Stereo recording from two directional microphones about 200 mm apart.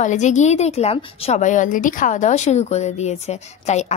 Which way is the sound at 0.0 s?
35° left (ahead or behind).